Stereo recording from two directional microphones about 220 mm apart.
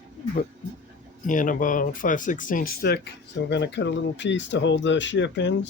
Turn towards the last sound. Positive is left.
turn(degrees=55)  # may be behind; listen again after turning